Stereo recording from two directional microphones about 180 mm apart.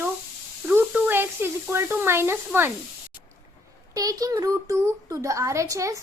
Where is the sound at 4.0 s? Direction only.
20° right (ahead or behind).